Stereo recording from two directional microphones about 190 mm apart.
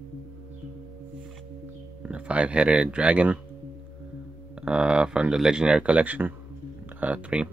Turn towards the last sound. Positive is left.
turn(degrees=-5)  # may be behind; listen again after turning